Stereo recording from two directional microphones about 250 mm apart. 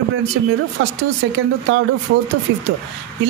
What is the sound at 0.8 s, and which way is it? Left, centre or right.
Speech, right.